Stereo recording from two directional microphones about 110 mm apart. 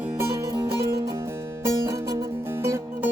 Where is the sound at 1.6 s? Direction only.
30° right (ahead or behind).